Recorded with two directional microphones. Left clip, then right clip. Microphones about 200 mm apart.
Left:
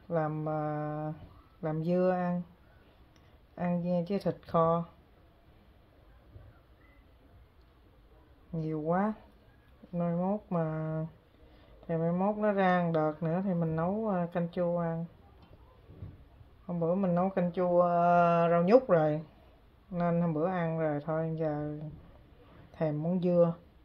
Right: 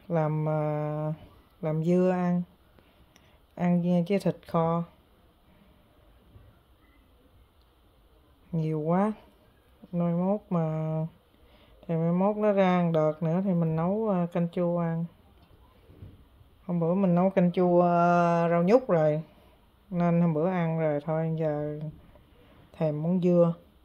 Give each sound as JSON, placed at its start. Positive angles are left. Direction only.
{"t": 0.1, "sound": "speech", "side_deg": -35}
{"t": 3.5, "sound": "speech", "side_deg": -35}
{"t": 8.5, "sound": "speech", "side_deg": -35}
{"t": 16.6, "sound": "speech", "side_deg": -30}